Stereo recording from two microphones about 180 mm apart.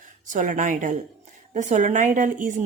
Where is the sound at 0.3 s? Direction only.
45° right (ahead or behind).